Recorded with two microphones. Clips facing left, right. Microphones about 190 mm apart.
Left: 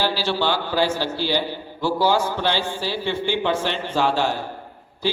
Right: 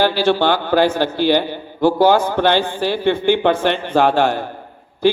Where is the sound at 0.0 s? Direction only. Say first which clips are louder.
Right 7 dB; 55° right (ahead or behind).